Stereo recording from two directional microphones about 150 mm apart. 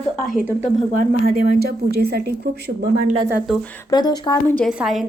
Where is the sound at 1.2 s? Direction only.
75° right (ahead or behind); by 2.2 s 90° right.